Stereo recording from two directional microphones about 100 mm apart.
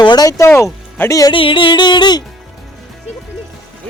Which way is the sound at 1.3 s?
60° left (ahead or behind).